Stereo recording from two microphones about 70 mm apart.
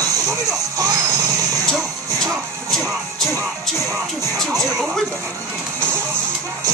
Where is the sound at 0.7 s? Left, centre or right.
Right.